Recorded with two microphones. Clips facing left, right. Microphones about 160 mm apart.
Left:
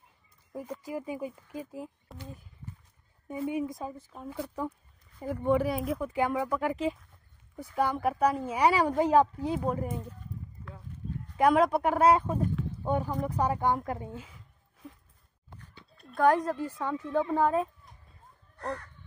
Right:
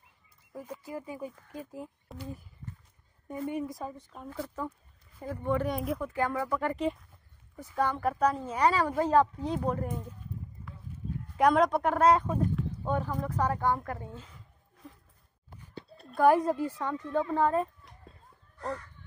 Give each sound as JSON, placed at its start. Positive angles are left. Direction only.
{"t": 0.5, "sound": "speech", "side_deg": 15}
{"t": 3.3, "sound": "speech", "side_deg": 5}
{"t": 5.7, "sound": "speech", "side_deg": 5}
{"t": 6.0, "sound": "speech", "side_deg": 15}
{"t": 11.3, "sound": "speech", "side_deg": 5}
{"t": 15.7, "sound": "a sound", "side_deg": -35}
{"t": 16.2, "sound": "speech", "side_deg": -10}
{"t": 16.7, "sound": "speech", "side_deg": 5}